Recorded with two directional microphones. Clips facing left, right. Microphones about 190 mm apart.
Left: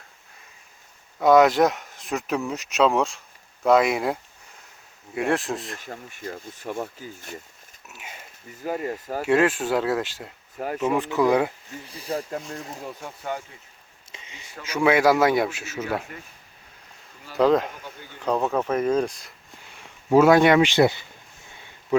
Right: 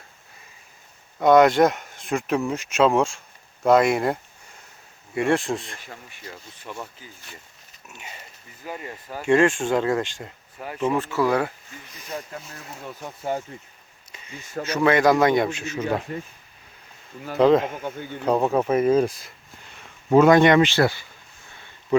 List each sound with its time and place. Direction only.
1.2 s speech: centre (ahead or behind)
5.8 s speech: 45° left (ahead or behind)
7.9 s speech: 5° left (ahead or behind)
8.6 s speech: 45° left (ahead or behind)
9.2 s speech: 5° left (ahead or behind)
11.9 s speech: 35° left (ahead or behind)
12.8 s speech: centre (ahead or behind)
14.3 s speech: 45° right (ahead or behind)
14.7 s speech: 10° left (ahead or behind)
17.3 s speech: centre (ahead or behind)
17.7 s speech: 55° right (ahead or behind)
18.2 s speech: 10° right (ahead or behind)
19.6 s speech: 10° left (ahead or behind)